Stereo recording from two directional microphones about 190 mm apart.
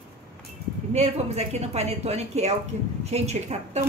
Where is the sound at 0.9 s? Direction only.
35° right (ahead or behind).